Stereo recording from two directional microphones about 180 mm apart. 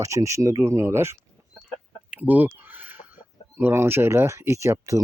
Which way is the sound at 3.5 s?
10° right (ahead or behind).